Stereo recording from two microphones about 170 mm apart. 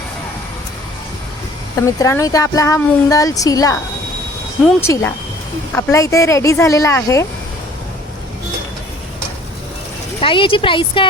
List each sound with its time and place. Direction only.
1.7 s speech: 20° left (ahead or behind)
4.8 s speech: 15° left (ahead or behind)
10.2 s a woman's voice: 30° left (ahead or behind)